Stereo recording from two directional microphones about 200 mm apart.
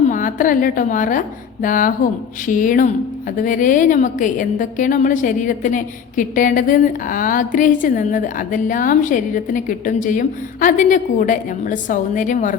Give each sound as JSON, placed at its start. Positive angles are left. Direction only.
{"t": 0.1, "sound": "a woman's voice", "side_deg": 40}